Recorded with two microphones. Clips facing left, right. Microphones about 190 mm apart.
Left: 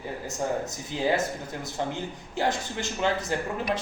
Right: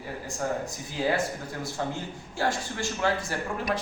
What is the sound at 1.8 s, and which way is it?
Speech, 20° left (ahead or behind).